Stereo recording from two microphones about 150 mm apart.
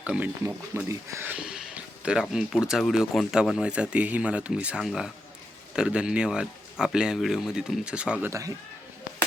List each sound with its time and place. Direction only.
0.0 s speech: 10° right (ahead or behind)
8.3 s speech: 20° right (ahead or behind)